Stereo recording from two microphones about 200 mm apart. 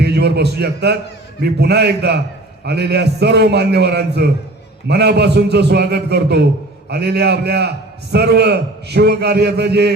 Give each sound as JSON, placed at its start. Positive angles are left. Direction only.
{"t": 0.0, "sound": "a man's voice", "side_deg": -55}